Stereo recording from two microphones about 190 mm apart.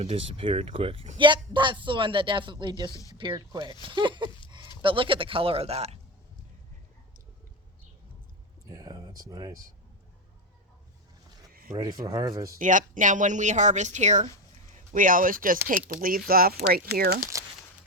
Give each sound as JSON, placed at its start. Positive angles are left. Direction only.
{"t": 0.0, "sound": "speech", "side_deg": -30}
{"t": 2.9, "sound": "speech", "side_deg": 20}
{"t": 3.2, "sound": "speech", "side_deg": -25}
{"t": 8.7, "sound": "a sound", "side_deg": -20}
{"t": 11.7, "sound": "speech", "side_deg": -20}
{"t": 12.5, "sound": "speech", "side_deg": -45}